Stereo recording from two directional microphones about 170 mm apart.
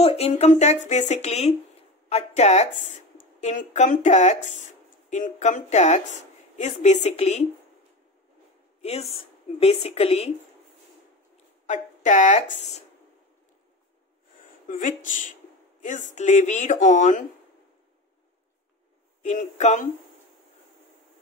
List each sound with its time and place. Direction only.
0.0 s speech: 40° left (ahead or behind)
9.6 s speech: 35° left (ahead or behind)
11.6 s speech: 45° left (ahead or behind)
14.7 s speech: 50° left (ahead or behind)
19.2 s speech: 45° left (ahead or behind)